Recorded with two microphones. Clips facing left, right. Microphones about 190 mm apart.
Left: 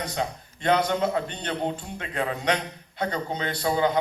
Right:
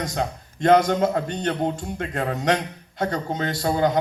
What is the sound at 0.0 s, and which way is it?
A man's voice, 45° right (ahead or behind).